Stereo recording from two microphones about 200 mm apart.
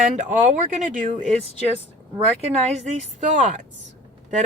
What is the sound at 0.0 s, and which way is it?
Speech, 40° right (ahead or behind).